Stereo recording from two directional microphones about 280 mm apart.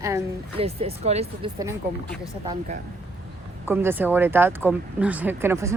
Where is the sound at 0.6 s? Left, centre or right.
Right.